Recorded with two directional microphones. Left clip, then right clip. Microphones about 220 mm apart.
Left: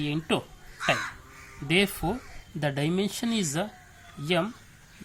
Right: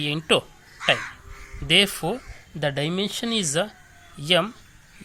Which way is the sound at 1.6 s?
15° right (ahead or behind).